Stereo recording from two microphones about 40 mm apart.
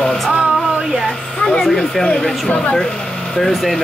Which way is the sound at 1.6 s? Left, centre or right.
Centre.